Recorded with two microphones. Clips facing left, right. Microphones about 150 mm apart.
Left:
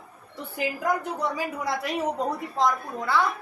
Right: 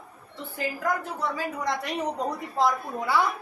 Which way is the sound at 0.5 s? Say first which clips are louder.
Left 2 dB; 15° left (ahead or behind).